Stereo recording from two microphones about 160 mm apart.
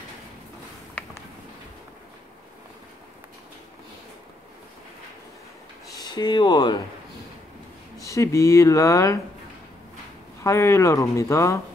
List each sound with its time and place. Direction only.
5.9 s speech: 25° left (ahead or behind)
8.0 s speech: 20° left (ahead or behind)
10.4 s speech: 20° left (ahead or behind)